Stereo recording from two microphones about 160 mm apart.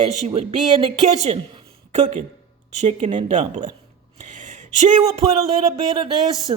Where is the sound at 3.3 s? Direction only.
45° right (ahead or behind).